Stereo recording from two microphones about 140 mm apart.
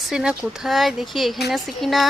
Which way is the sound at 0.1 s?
5° right (ahead or behind).